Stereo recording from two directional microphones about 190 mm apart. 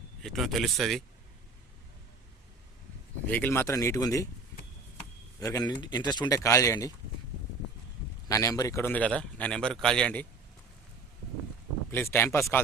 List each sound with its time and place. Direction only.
0.2 s speech: centre (ahead or behind)
3.2 s a man's voice: 10° left (ahead or behind)
5.4 s speech: 20° left (ahead or behind)
8.3 s a man's voice: 15° left (ahead or behind)
11.9 s a man's voice: 10° left (ahead or behind)